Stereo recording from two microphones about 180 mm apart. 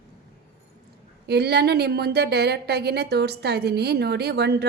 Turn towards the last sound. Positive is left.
turn(degrees=-65)  # may be behind; listen again after turning